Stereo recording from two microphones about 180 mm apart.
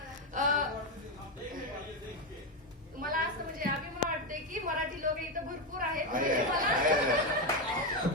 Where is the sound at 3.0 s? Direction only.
50° right (ahead or behind).